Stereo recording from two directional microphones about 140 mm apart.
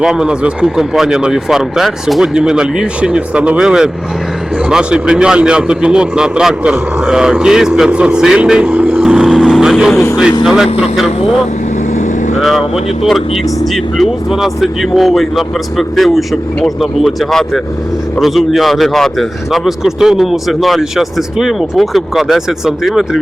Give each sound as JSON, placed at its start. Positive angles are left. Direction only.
{"t": 0.0, "sound": "a man's voice", "side_deg": -5}
{"t": 9.9, "sound": "speech", "side_deg": 15}
{"t": 10.4, "sound": "a man's voice", "side_deg": -5}
{"t": 12.4, "sound": "a man's voice", "side_deg": 0}